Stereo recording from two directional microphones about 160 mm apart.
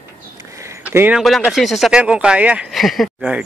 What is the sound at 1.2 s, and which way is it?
Speech, centre (ahead or behind).